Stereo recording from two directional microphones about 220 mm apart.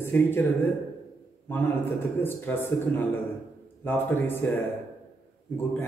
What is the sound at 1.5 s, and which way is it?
A man's voice, 10° left (ahead or behind).